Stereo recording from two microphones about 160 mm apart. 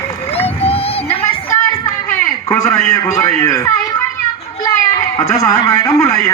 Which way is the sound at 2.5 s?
15° left (ahead or behind).